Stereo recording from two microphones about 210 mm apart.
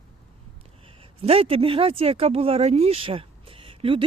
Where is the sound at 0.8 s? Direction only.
25° right (ahead or behind).